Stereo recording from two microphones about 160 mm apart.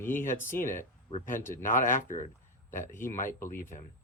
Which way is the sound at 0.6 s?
55° left (ahead or behind).